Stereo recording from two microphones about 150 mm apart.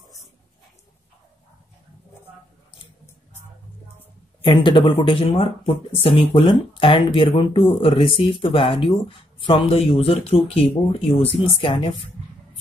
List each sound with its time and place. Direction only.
4.5 s speech: 30° left (ahead or behind)